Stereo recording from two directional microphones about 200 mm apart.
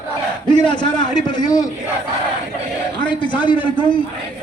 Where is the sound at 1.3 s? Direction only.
20° left (ahead or behind).